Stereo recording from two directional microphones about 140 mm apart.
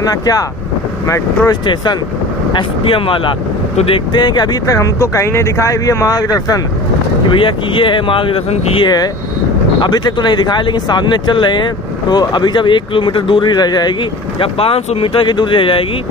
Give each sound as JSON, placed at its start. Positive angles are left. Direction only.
{"t": 0.0, "sound": "speech", "side_deg": 25}
{"t": 2.5, "sound": "speech", "side_deg": 40}
{"t": 7.2, "sound": "speech", "side_deg": 40}
{"t": 8.8, "sound": "speech", "side_deg": 30}
{"t": 14.4, "sound": "speech", "side_deg": 40}